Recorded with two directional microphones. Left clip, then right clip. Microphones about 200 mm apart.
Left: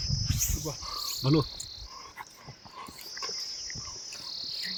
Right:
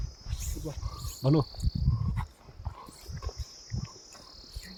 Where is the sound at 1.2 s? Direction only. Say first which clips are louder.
Even; 65° right (ahead or behind).